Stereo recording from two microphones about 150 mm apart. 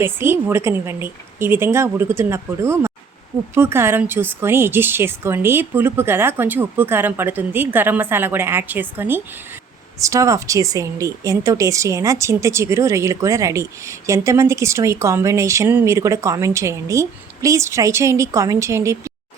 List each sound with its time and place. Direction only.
0.0 s speech: 15° right (ahead or behind)